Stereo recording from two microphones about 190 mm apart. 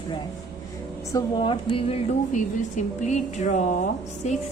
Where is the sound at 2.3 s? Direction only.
40° left (ahead or behind).